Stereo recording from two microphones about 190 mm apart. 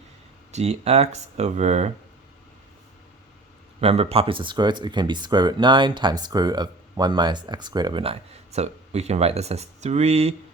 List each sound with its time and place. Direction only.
0.5 s speech: 35° right (ahead or behind)
3.8 s speech: 30° right (ahead or behind)